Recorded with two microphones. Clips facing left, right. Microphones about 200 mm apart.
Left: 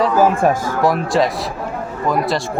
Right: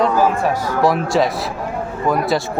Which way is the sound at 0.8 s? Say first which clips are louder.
Right 2 dB; centre (ahead or behind).